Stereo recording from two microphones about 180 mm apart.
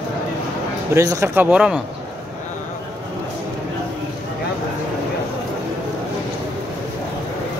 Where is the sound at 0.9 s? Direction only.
15° right (ahead or behind).